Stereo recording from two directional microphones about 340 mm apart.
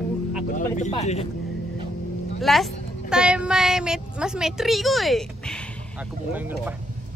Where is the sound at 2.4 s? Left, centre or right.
Centre.